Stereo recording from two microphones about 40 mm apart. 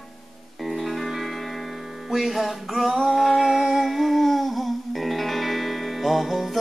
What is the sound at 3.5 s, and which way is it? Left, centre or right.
Music, centre.